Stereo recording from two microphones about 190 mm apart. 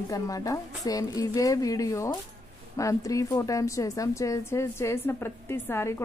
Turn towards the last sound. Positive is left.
turn(degrees=10)  # may be behind; listen again after turning